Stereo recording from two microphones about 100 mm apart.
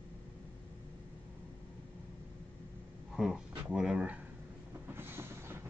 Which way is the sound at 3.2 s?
5° right (ahead or behind).